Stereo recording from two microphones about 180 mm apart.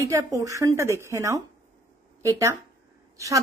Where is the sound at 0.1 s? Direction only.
20° right (ahead or behind).